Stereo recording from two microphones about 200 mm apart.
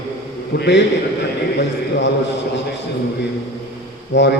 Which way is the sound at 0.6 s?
55° left (ahead or behind).